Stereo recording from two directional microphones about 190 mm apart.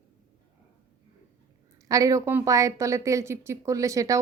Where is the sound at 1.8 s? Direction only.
20° right (ahead or behind).